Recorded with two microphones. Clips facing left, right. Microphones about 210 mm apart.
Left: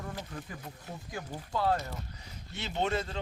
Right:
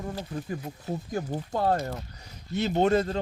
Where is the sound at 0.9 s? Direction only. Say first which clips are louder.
Right 10 dB; 40° right (ahead or behind).